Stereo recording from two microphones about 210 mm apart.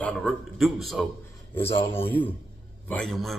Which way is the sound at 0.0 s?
5° left (ahead or behind).